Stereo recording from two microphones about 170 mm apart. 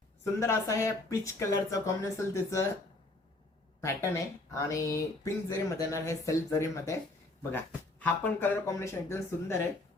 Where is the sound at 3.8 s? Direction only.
15° left (ahead or behind).